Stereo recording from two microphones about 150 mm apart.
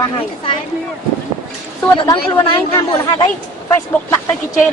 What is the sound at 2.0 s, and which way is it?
Speech, 25° left (ahead or behind).